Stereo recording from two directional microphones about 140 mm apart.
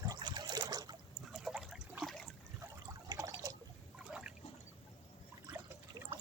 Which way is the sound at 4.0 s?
10° right (ahead or behind).